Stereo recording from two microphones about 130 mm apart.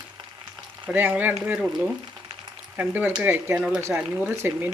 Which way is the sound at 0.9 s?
15° right (ahead or behind).